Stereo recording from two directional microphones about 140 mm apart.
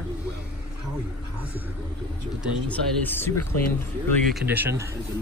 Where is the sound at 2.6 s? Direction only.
15° left (ahead or behind).